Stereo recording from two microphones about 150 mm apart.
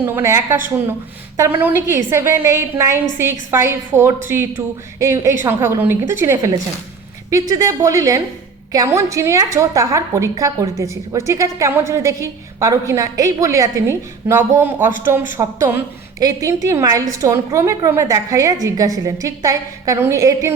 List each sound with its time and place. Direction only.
0.0 s a woman's voice: 15° right (ahead or behind)